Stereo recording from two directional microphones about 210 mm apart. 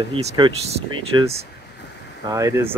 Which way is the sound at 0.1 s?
25° right (ahead or behind).